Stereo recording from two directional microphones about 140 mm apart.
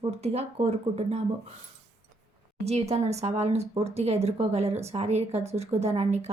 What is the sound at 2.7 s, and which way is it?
A woman's voice, 50° right (ahead or behind).